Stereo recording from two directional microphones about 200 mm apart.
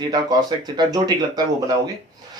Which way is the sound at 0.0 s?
20° right (ahead or behind).